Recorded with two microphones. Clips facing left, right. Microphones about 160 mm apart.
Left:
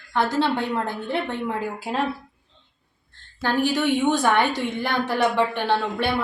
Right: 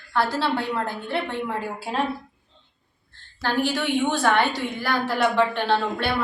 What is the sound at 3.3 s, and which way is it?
A woman's voice, 15° left (ahead or behind).